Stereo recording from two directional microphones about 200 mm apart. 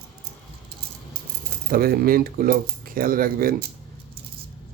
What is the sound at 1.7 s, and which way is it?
Speech, 50° right (ahead or behind).